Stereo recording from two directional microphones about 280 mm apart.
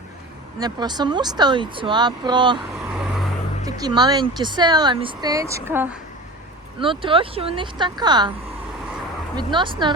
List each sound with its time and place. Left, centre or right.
0.6 s speech: centre
2.9 s vehicle: centre
3.6 s speech: centre
6.7 s speech: centre
9.3 s speech: centre